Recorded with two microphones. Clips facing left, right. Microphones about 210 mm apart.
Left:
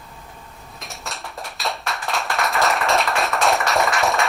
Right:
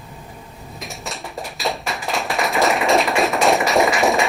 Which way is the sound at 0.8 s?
Centre (ahead or behind).